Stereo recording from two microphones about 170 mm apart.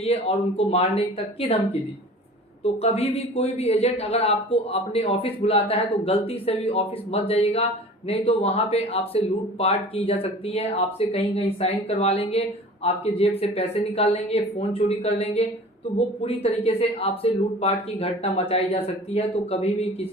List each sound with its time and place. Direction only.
0.0 s a man's voice: 35° left (ahead or behind)
2.8 s a man's voice: 40° left (ahead or behind)